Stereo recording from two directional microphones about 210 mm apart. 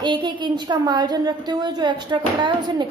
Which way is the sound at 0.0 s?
20° right (ahead or behind).